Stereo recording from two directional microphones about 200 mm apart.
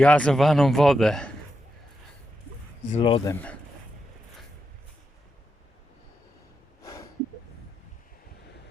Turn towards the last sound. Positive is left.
turn(degrees=15)  # may be behind; listen again after turning